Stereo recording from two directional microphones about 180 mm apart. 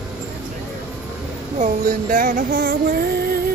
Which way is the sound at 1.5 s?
45° right (ahead or behind).